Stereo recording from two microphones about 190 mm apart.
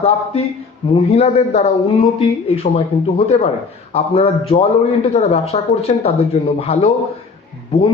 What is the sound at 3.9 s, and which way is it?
A man's voice, 30° left (ahead or behind).